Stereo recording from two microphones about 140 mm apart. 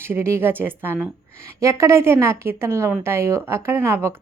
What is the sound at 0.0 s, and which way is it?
A woman's voice, 15° right (ahead or behind).